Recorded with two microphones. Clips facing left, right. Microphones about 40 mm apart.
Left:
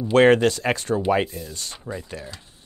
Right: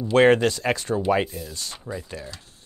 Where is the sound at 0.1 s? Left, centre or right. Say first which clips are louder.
Left 1 dB; left.